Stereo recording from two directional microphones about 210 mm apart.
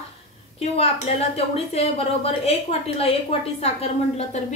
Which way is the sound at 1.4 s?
30° left (ahead or behind).